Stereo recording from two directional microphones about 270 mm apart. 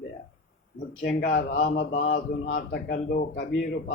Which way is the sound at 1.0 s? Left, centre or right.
Left.